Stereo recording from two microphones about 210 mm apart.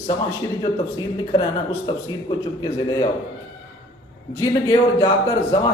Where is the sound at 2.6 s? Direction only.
20° left (ahead or behind).